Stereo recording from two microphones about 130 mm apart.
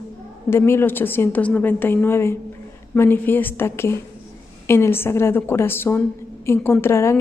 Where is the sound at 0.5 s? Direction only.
20° left (ahead or behind).